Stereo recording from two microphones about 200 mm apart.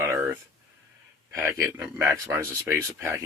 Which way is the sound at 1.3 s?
10° right (ahead or behind).